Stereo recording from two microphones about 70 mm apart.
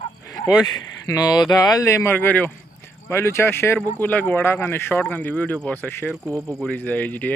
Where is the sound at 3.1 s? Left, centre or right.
Left.